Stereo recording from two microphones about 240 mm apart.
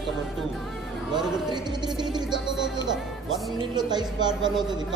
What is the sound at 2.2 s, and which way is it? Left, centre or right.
Speech, centre.